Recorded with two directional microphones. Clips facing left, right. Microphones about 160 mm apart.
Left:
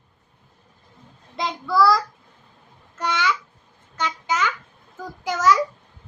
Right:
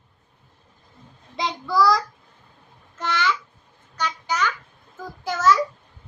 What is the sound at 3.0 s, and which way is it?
Speech, 15° left (ahead or behind).